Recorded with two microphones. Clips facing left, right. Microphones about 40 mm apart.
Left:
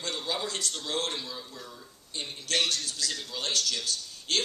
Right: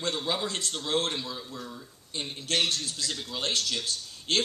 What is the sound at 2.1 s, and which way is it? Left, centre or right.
A man's voice, right.